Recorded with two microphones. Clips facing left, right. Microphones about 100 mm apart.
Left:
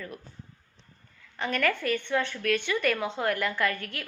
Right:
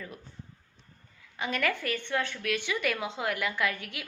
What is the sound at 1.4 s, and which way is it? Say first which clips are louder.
A woman's voice: left 3 dB; 15° right (ahead or behind).